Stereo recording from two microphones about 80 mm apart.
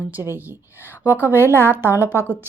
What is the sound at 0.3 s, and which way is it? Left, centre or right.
Speech, right.